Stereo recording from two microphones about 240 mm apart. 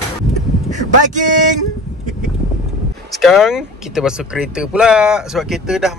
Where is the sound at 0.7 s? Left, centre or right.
Right.